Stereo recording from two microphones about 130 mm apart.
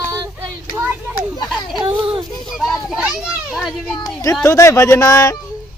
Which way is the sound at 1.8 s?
40° right (ahead or behind).